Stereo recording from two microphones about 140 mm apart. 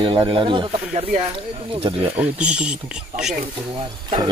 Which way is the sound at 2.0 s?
10° right (ahead or behind).